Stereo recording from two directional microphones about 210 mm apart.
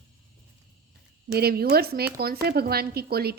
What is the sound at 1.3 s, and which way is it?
Speech, 50° right (ahead or behind).